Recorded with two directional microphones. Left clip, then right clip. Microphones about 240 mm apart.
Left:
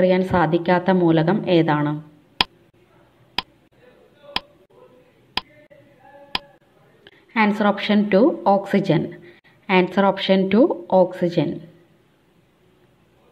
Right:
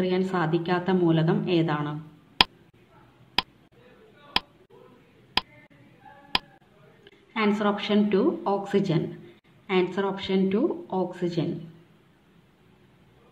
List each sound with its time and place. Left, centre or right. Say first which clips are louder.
0.0 s a woman's voice: left 9 dB; left
2.4 s tick: even; centre
3.4 s a sound: even; centre
5.4 s tick: even; centre
7.1 s a woman's voice: left 6 dB; left